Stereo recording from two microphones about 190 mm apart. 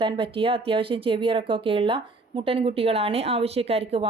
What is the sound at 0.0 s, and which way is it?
Speech, 25° right (ahead or behind).